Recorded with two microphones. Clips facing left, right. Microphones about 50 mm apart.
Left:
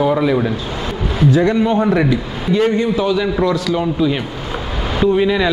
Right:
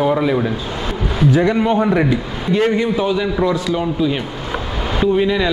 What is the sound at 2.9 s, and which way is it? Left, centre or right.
Speech, right.